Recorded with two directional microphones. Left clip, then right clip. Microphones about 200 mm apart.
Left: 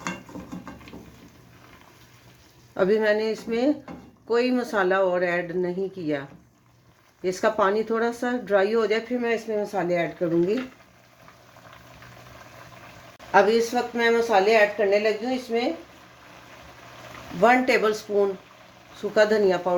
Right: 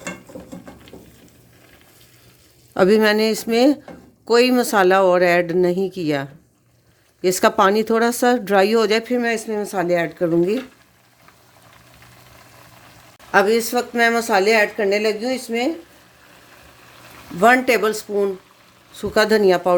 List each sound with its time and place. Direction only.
2.7 s speech: 65° right (ahead or behind); by 10.6 s 45° right (ahead or behind)
13.3 s speech: 35° right (ahead or behind); by 15.1 s 50° right (ahead or behind)
17.4 s speech: 40° right (ahead or behind)
19.1 s speech: 50° right (ahead or behind)